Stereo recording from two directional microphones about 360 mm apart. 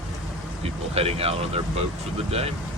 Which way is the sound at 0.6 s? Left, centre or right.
Centre.